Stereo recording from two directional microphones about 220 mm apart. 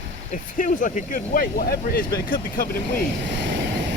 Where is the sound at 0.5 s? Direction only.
35° left (ahead or behind).